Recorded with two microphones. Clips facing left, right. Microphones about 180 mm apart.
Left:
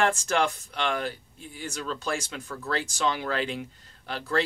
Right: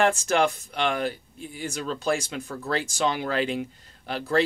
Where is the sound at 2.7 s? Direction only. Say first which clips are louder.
Right 2 dB; 10° right (ahead or behind).